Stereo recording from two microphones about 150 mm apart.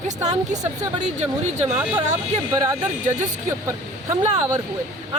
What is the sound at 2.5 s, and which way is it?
Speech, 25° right (ahead or behind).